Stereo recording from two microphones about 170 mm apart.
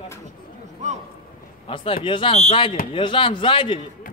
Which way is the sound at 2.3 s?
45° left (ahead or behind).